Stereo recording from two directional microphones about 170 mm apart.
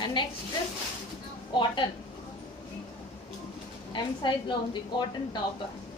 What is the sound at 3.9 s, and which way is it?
A woman's voice, 25° left (ahead or behind).